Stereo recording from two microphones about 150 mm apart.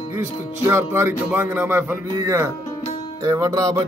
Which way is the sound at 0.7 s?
15° right (ahead or behind).